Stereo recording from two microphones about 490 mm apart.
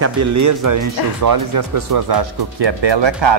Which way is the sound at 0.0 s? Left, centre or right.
Right.